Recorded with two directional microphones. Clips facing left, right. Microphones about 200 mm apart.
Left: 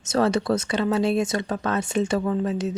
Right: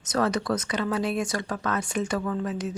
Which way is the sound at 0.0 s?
25° left (ahead or behind).